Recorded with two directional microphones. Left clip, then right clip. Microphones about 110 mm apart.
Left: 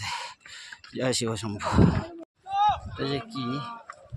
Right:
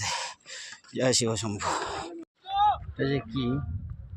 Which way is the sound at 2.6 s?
15° right (ahead or behind).